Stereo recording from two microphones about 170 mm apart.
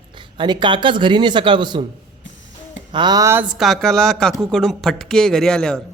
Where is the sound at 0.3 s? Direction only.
25° right (ahead or behind).